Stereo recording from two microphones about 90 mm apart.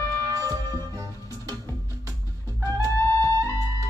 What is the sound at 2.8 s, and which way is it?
Music, 35° left (ahead or behind).